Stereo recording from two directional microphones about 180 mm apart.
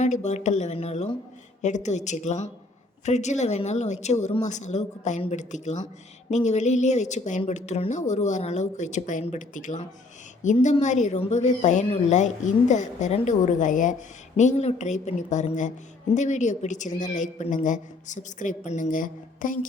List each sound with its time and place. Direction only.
0.0 s a woman's voice: 40° left (ahead or behind)